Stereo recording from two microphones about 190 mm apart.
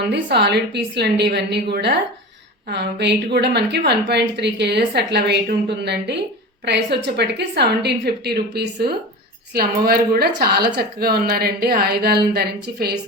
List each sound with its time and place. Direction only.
0.0 s a woman's voice: 60° right (ahead or behind)